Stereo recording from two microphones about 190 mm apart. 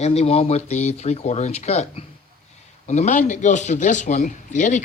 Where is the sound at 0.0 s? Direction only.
35° left (ahead or behind).